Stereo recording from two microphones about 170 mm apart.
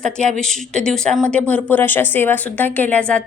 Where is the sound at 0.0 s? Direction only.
5° left (ahead or behind).